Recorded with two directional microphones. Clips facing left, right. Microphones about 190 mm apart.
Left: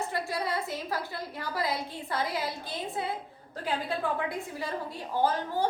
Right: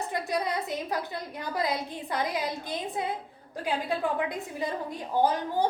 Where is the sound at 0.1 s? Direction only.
20° right (ahead or behind).